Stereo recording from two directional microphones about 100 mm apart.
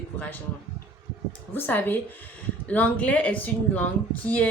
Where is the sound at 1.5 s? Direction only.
20° left (ahead or behind).